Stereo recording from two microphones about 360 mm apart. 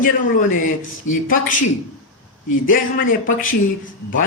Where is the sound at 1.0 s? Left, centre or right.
Left.